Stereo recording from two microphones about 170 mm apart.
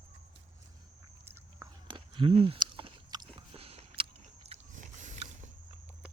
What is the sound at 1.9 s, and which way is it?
Biting, 30° right (ahead or behind).